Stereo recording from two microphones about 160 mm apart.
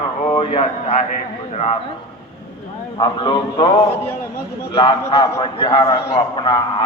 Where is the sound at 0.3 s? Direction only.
40° left (ahead or behind).